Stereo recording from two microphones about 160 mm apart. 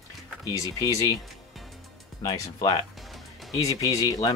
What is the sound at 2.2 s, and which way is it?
Speech, 20° left (ahead or behind).